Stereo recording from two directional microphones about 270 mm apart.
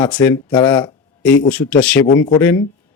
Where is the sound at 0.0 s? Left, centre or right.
Centre.